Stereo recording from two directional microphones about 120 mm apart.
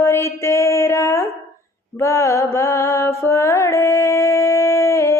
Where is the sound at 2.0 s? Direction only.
25° left (ahead or behind).